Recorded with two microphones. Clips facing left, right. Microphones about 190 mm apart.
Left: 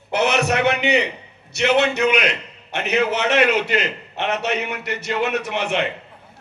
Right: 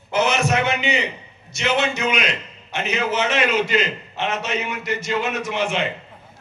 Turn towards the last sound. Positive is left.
turn(degrees=60)  # may be behind; listen again after turning